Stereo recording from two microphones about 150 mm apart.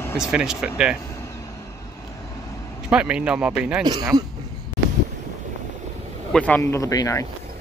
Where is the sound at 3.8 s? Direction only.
30° right (ahead or behind).